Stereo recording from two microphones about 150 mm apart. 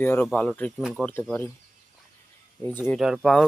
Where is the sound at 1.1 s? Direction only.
10° left (ahead or behind).